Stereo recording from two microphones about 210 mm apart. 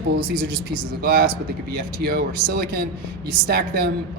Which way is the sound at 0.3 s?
45° right (ahead or behind).